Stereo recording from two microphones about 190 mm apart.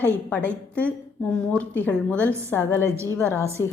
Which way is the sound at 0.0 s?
5° left (ahead or behind).